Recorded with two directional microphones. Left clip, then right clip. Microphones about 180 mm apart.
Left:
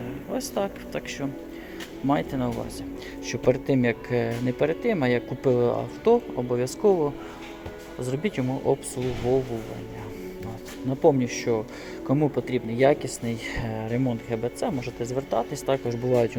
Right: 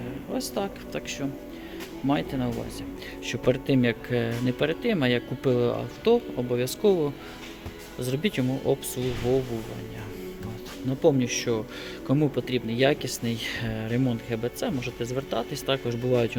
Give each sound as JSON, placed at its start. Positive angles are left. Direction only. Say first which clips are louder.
{"t": 0.3, "sound": "speech", "louder": "left 2 dB", "side_deg": -5}
{"t": 8.7, "sound": "speech", "louder": "left 2 dB", "side_deg": -15}
{"t": 11.0, "sound": "speech", "louder": "left 2 dB", "side_deg": -10}